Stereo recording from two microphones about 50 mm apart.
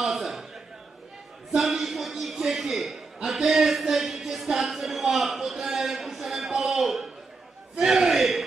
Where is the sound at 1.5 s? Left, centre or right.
Centre.